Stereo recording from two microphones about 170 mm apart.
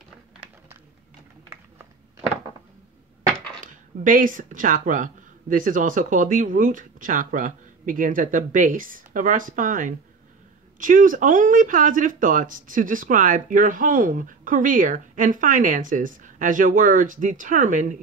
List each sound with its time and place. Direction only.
3.6 s speech: 50° right (ahead or behind)